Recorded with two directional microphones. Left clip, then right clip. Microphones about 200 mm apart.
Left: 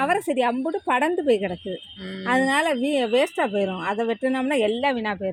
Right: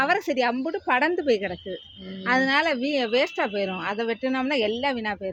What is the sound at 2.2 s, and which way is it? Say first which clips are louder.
Speech: left 1 dB; 45° left (ahead or behind).